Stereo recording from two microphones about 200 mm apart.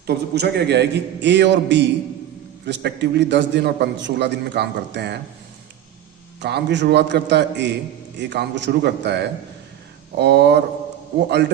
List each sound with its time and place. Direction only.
0.1 s a man's voice: 55° right (ahead or behind)
6.4 s a man's voice: 60° right (ahead or behind)